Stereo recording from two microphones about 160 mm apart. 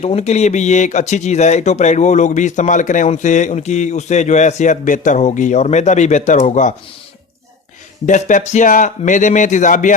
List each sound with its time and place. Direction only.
0.0 s speech: 40° left (ahead or behind)
8.0 s speech: 50° left (ahead or behind)